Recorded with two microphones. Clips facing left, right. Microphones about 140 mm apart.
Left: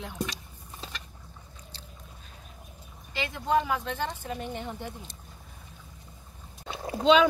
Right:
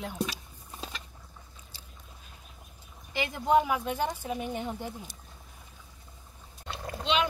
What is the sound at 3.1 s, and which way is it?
Speech, 10° right (ahead or behind).